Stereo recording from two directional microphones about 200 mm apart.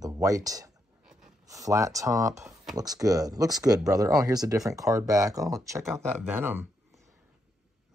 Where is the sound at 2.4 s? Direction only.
Centre (ahead or behind).